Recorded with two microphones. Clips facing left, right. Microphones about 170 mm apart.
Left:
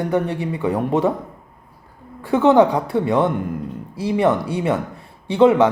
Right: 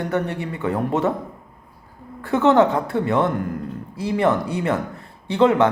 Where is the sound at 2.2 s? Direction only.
10° left (ahead or behind).